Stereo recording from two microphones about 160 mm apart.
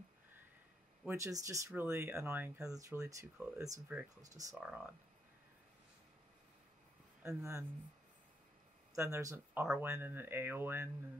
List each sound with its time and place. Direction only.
1.0 s speech: 20° right (ahead or behind)
4.6 s speech: 10° right (ahead or behind)
7.2 s speech: 15° right (ahead or behind)
8.9 s speech: 20° right (ahead or behind)